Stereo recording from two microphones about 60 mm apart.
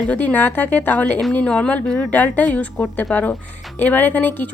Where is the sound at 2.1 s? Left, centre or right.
Left.